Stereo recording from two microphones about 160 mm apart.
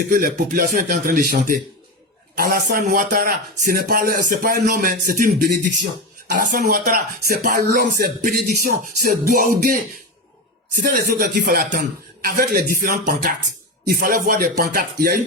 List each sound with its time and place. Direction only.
0.1 s speech: 60° right (ahead or behind)
10.8 s speech: 65° right (ahead or behind)
13.8 s music: 65° right (ahead or behind)